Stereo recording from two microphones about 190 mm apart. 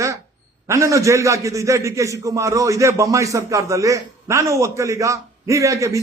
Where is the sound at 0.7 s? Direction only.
15° right (ahead or behind).